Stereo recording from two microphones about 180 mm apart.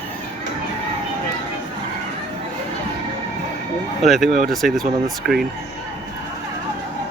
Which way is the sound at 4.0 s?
Centre (ahead or behind).